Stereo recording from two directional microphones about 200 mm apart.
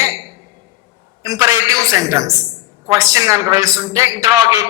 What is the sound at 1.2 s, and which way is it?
A man's voice, 15° right (ahead or behind).